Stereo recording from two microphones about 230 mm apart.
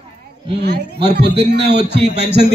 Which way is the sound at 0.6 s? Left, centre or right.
Right.